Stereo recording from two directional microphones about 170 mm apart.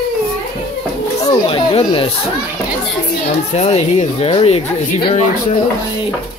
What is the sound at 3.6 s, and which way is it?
Speech, 40° left (ahead or behind).